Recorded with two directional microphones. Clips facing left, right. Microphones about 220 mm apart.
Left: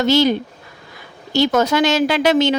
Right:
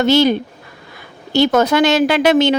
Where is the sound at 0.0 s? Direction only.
60° right (ahead or behind).